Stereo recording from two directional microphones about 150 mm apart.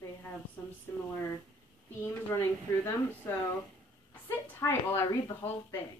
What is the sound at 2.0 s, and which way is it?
Speech, 15° left (ahead or behind).